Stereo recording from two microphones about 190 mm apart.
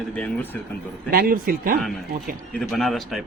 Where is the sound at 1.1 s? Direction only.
50° right (ahead or behind).